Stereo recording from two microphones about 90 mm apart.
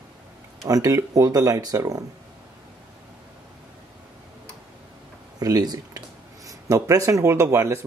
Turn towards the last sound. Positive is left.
turn(degrees=-35)  # may be behind; listen again after turning